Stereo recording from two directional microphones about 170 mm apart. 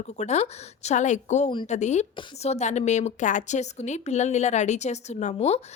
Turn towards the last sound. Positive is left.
turn(degrees=40)  # may be behind; listen again after turning